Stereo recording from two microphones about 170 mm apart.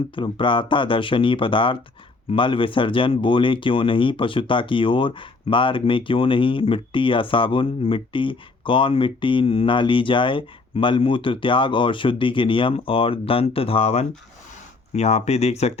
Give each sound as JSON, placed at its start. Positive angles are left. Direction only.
{"t": 0.2, "sound": "speech", "side_deg": 30}